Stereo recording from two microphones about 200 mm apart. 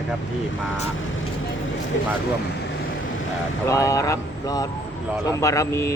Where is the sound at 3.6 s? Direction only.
15° left (ahead or behind).